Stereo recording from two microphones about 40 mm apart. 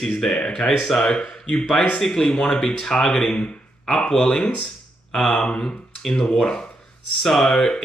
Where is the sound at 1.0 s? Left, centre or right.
Left.